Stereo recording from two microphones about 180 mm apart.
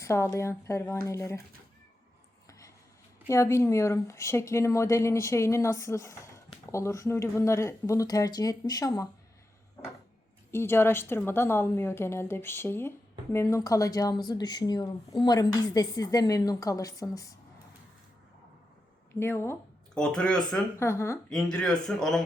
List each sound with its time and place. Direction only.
0.0 s speech: 15° left (ahead or behind)
3.2 s speech: 15° left (ahead or behind)
10.5 s speech: 15° left (ahead or behind)
19.2 s speech: 15° left (ahead or behind)
20.8 s speech: 15° left (ahead or behind)
21.2 s speech: 5° left (ahead or behind)